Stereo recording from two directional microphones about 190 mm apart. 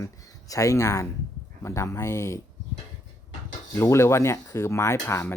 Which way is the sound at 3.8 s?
15° left (ahead or behind).